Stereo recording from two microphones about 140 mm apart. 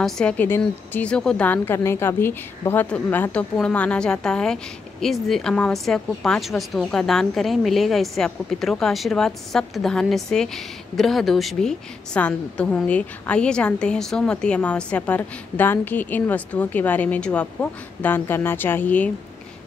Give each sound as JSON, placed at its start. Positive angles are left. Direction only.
{"t": 0.0, "sound": "a woman's voice", "side_deg": 5}